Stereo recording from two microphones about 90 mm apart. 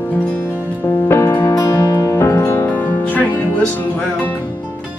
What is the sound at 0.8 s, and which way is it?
Music, 30° left (ahead or behind).